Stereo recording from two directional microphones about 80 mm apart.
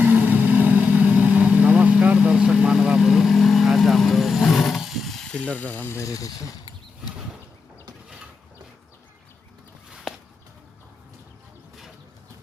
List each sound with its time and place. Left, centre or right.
0.0 s vehicle: centre
5.9 s speech: left
9.9 s a sound: centre